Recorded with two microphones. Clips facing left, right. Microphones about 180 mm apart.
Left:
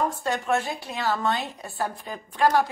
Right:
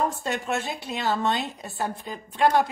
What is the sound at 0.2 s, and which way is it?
A woman's voice, 20° right (ahead or behind).